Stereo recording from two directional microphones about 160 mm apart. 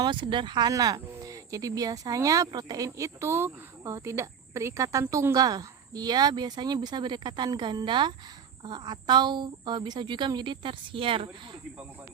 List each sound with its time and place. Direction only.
0.0 s speech: 30° right (ahead or behind)